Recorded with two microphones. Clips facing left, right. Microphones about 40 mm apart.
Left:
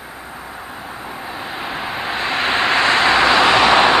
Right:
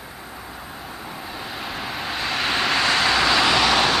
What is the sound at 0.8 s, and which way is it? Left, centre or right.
Vehicle, centre.